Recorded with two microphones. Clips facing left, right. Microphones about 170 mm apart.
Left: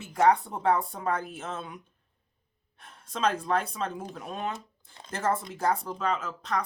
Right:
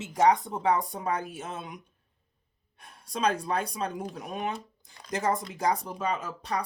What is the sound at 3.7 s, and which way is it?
Speech, 15° right (ahead or behind).